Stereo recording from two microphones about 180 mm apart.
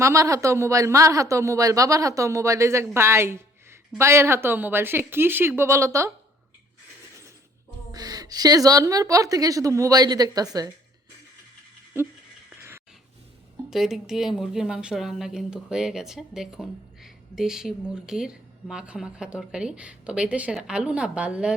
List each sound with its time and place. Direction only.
0.0 s speech: 15° right (ahead or behind)
7.9 s a woman's voice: 20° right (ahead or behind)
13.7 s a woman's voice: centre (ahead or behind)